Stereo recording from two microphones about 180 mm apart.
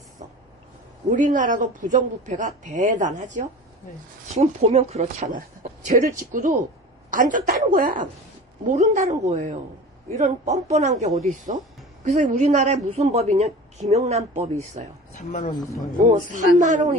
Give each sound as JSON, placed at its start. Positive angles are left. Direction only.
{"t": 1.1, "sound": "a man's voice", "side_deg": -45}
{"t": 15.1, "sound": "speech", "side_deg": 45}
{"t": 15.5, "sound": "a man's voice", "side_deg": 20}
{"t": 16.0, "sound": "speech", "side_deg": -45}